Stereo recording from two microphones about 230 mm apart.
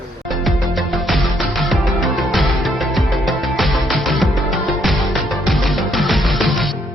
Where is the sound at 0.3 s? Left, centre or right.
Centre.